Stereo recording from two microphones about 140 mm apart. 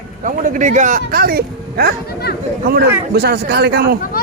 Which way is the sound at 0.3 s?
65° right (ahead or behind).